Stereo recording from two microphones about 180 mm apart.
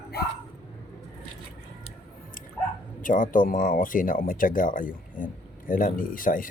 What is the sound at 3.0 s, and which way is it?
Speech, 45° left (ahead or behind).